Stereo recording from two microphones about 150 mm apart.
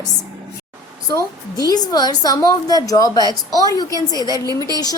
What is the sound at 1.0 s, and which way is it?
A woman's voice, 25° left (ahead or behind).